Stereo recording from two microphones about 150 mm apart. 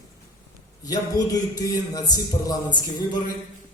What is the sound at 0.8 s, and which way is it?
Speech, 25° left (ahead or behind).